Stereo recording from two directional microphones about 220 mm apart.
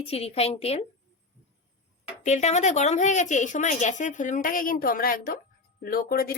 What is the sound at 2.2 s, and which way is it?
A woman's voice, 30° left (ahead or behind).